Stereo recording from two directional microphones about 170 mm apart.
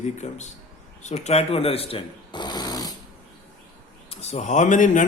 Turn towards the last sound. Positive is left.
turn(degrees=50)  # may be behind; listen again after turning